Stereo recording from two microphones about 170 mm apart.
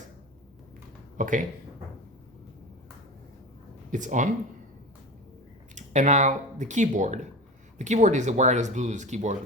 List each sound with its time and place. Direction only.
1.1 s speech: 50° right (ahead or behind)
3.9 s speech: 45° right (ahead or behind)
5.7 s speech: 45° right (ahead or behind)